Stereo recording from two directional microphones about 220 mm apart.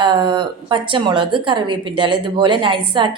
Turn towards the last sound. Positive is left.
turn(degrees=-20)  # may be behind; listen again after turning